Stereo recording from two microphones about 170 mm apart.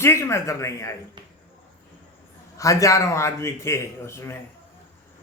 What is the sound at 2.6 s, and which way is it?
Speech, 20° left (ahead or behind).